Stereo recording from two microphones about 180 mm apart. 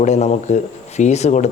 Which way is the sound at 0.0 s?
40° left (ahead or behind).